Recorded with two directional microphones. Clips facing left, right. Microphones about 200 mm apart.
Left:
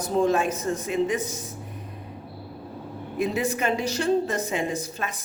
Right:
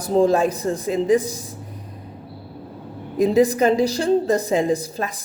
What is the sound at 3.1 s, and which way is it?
Speech, 35° right (ahead or behind).